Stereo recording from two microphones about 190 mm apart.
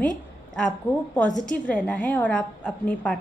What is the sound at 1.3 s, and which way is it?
Speech, 40° left (ahead or behind).